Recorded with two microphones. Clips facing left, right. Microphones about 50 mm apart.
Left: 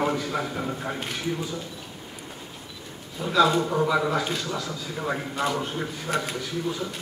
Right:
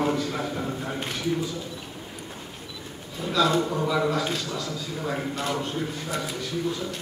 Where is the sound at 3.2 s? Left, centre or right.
Centre.